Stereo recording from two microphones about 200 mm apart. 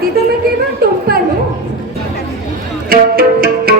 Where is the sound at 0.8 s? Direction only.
50° right (ahead or behind).